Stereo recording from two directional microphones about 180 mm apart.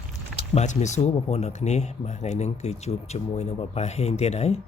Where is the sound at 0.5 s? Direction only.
40° left (ahead or behind).